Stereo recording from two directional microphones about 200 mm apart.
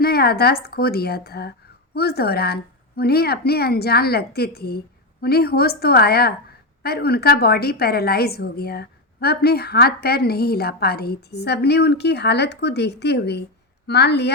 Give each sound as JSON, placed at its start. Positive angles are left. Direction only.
{"t": 0.0, "sound": "a woman's voice", "side_deg": 50}